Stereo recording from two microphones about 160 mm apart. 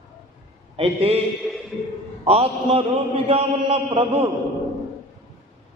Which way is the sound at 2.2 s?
40° right (ahead or behind).